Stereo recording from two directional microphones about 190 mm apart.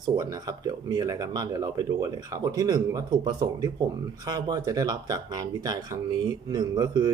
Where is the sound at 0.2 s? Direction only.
20° right (ahead or behind).